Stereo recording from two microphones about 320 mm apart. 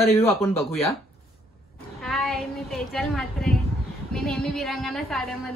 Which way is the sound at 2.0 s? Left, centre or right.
Centre.